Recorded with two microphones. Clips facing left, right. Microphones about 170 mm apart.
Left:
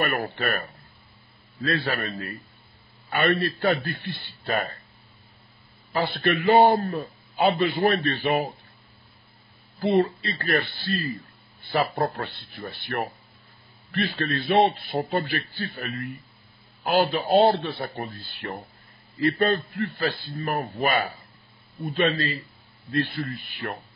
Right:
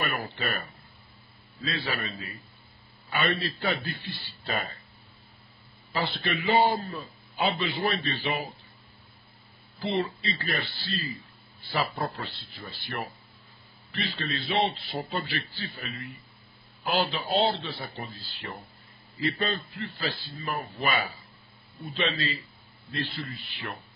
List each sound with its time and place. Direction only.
0.0 s a man's voice: 55° left (ahead or behind)
5.9 s a man's voice: 50° left (ahead or behind)
9.8 s a man's voice: 50° left (ahead or behind)